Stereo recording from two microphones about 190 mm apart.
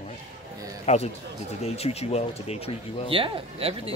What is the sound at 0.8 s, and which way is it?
Speech, 35° left (ahead or behind).